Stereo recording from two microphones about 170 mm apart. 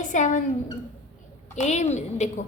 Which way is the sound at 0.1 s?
50° left (ahead or behind).